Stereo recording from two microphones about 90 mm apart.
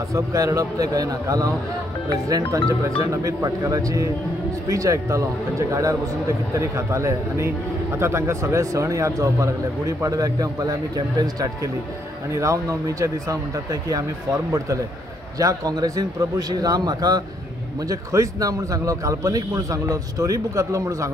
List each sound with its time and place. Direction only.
0.1 s speech: 35° right (ahead or behind)
15.3 s a man's voice: 40° right (ahead or behind)